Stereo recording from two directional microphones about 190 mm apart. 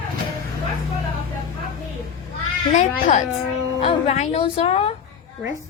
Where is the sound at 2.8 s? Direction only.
40° left (ahead or behind).